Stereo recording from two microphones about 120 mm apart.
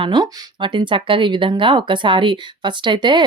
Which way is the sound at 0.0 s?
40° right (ahead or behind).